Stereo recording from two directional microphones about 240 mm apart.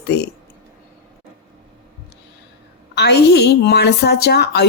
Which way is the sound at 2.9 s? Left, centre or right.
Left.